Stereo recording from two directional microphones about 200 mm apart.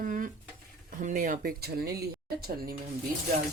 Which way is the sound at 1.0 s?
40° right (ahead or behind).